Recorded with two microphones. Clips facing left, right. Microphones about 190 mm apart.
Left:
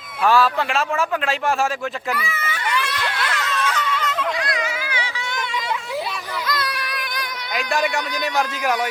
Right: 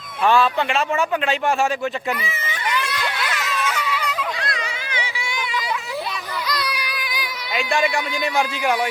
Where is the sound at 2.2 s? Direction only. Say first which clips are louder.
Left 1 dB; 25° right (ahead or behind).